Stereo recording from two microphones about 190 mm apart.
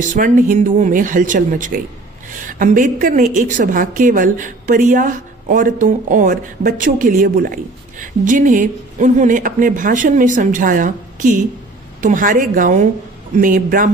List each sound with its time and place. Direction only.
0.1 s a woman's voice: 45° right (ahead or behind)